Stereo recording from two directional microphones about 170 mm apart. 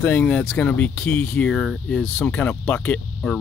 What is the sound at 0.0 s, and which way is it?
Speech, 10° left (ahead or behind).